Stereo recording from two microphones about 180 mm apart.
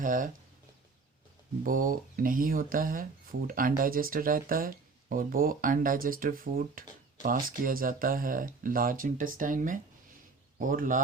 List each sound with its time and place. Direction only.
0.0 s speech: 50° right (ahead or behind)
1.6 s speech: 50° right (ahead or behind)